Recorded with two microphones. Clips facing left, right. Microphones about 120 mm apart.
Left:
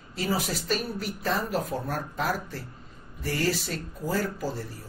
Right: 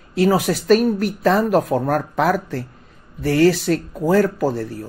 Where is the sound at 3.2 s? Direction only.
70° right (ahead or behind).